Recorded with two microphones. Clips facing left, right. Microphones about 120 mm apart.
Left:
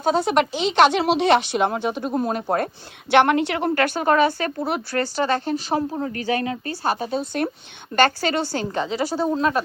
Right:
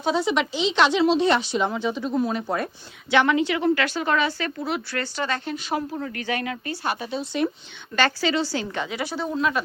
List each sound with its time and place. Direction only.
0.0 s speech: 50° left (ahead or behind)
3.1 s a woman's voice: 60° left (ahead or behind)
8.6 s speech: 35° left (ahead or behind)